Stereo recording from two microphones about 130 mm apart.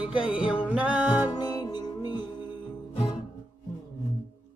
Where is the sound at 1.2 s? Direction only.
30° left (ahead or behind).